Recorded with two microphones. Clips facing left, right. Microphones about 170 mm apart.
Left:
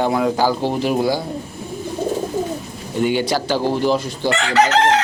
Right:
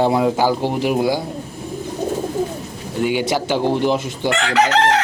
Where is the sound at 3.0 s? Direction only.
10° right (ahead or behind).